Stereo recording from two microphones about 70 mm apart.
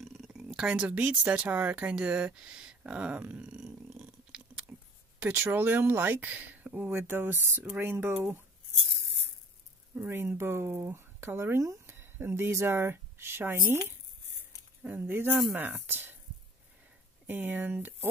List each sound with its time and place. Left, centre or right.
0.0 s a sound: centre
0.3 s speech: centre
4.7 s a sound: right
5.2 s speech: right
9.9 s speech: right
17.3 s speech: right